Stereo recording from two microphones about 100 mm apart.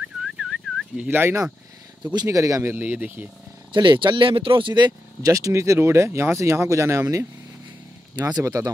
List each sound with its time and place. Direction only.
0.2 s whistling: 5° right (ahead or behind)
1.1 s speech: 25° right (ahead or behind)
2.7 s speech: 15° right (ahead or behind)
3.7 s speech: 50° right (ahead or behind); by 7.2 s 30° right (ahead or behind)
8.4 s speech: 30° right (ahead or behind)